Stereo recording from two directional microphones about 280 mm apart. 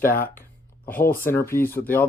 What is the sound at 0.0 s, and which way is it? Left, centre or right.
Speech, left.